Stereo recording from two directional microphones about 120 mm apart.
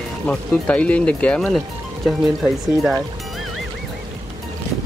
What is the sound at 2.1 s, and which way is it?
Speech, centre (ahead or behind).